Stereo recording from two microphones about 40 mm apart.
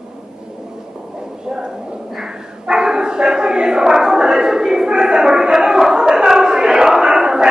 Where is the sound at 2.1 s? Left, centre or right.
Centre.